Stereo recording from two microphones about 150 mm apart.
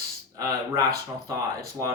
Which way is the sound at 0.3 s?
20° right (ahead or behind).